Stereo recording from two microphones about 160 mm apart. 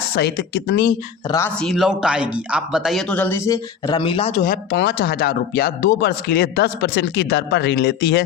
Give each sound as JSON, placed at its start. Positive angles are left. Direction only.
{"t": 0.2, "sound": "speech", "side_deg": 90}
{"t": 1.5, "sound": "speech", "side_deg": 0}
{"t": 4.3, "sound": "speech", "side_deg": 55}